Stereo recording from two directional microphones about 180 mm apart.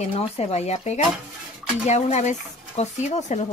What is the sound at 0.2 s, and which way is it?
Speech, 35° left (ahead or behind).